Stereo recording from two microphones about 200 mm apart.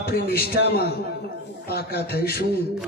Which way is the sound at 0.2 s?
50° left (ahead or behind).